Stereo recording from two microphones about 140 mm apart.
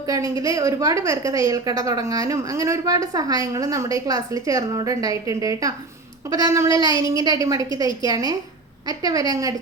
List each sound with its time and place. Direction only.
0.0 s a woman's voice: 25° right (ahead or behind)